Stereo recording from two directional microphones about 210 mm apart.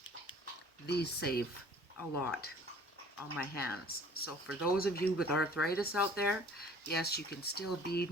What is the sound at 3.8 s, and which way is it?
Speech, 45° left (ahead or behind).